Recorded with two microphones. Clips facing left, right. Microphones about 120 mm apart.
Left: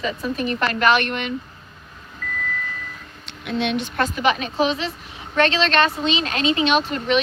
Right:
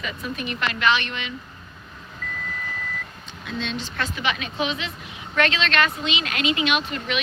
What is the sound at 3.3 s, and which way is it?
Speech, 65° left (ahead or behind).